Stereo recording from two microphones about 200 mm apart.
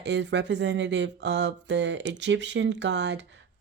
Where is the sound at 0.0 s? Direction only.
60° right (ahead or behind).